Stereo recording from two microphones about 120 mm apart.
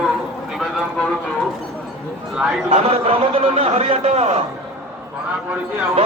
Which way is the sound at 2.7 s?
55° right (ahead or behind).